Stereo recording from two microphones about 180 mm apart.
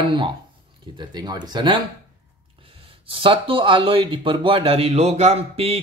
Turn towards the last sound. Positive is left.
turn(degrees=-35)  # may be behind; listen again after turning